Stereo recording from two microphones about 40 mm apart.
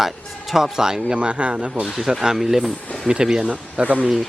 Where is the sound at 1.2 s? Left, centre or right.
Right.